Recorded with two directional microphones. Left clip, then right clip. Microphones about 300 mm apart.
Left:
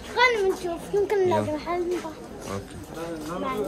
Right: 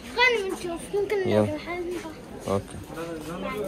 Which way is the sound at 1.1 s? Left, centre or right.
Centre.